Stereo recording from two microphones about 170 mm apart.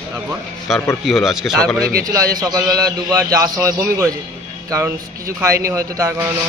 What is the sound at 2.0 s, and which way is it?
A man's voice, 20° right (ahead or behind).